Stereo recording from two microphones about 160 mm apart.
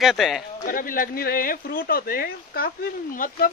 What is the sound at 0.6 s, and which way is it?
Speech, 60° left (ahead or behind).